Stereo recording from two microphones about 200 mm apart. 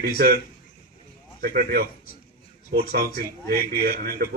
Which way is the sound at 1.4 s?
50° right (ahead or behind).